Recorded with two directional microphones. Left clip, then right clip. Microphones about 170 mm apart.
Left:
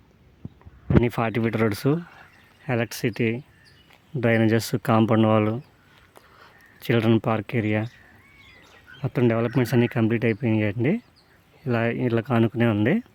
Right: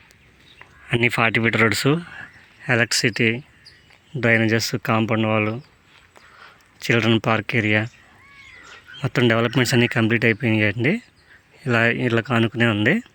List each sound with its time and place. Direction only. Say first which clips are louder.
1.5 s speech: right 6 dB; 10° left (ahead or behind)
9.0 s speech: right 4 dB; centre (ahead or behind)